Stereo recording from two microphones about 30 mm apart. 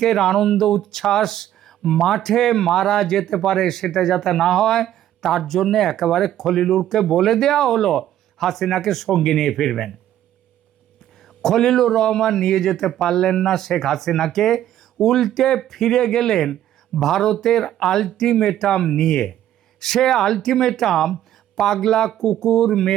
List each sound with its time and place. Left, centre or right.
0.0 s speech: centre
11.4 s speech: centre